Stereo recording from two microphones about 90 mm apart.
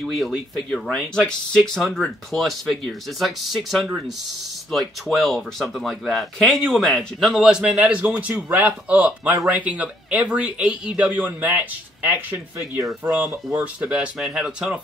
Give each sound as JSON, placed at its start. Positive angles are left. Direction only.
{"t": 0.0, "sound": "speech", "side_deg": 5}
{"t": 13.2, "sound": "speech", "side_deg": -35}
{"t": 13.6, "sound": "speech", "side_deg": -15}